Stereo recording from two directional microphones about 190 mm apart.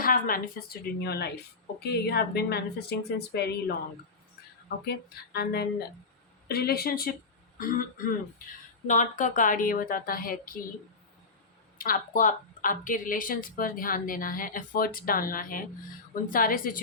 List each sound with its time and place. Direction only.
0.0 s speech: 50° left (ahead or behind)
4.9 s speech: 55° left (ahead or behind)
11.8 s speech: 45° left (ahead or behind)